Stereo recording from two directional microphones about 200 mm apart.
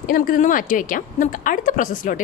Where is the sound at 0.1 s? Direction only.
45° left (ahead or behind).